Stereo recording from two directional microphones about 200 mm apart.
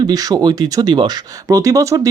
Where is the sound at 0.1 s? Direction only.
20° right (ahead or behind).